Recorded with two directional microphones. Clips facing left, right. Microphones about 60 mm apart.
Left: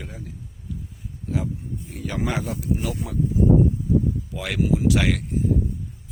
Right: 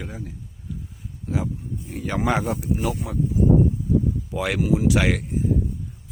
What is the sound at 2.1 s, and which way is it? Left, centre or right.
Speech, right.